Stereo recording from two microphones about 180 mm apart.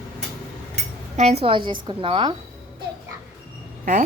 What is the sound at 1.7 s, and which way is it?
Speech, 30° right (ahead or behind).